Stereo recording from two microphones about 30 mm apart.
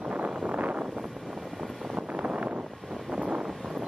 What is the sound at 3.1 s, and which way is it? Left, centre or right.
Wind noise, right.